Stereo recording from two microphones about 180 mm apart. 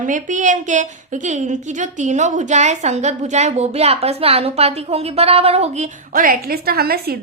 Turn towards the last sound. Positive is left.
turn(degrees=-60)  # may be behind; listen again after turning